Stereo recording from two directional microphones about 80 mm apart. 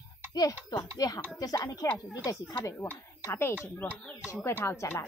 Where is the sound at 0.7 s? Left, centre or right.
Left.